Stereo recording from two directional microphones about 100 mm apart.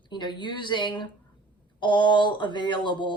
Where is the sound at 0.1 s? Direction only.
50° left (ahead or behind).